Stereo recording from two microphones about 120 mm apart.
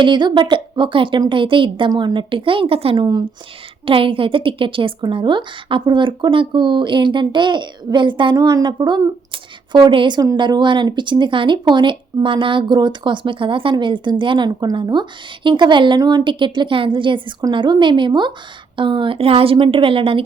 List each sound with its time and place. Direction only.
0.0 s a woman's voice: 40° right (ahead or behind)